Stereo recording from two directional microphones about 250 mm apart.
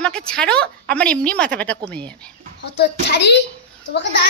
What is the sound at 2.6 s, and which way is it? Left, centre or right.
Speech, left.